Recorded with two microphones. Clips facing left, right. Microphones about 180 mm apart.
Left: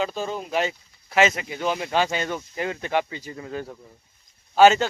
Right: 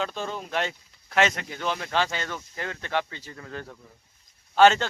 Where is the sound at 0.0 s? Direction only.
5° left (ahead or behind).